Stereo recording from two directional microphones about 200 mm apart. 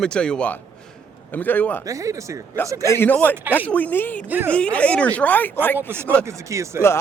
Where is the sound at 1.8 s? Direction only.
15° right (ahead or behind).